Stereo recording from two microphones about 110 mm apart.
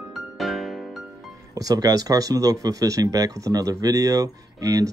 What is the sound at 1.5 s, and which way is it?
A man's voice, 35° right (ahead or behind).